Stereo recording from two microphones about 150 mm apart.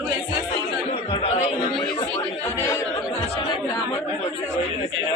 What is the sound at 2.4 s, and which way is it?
Speech, 20° left (ahead or behind).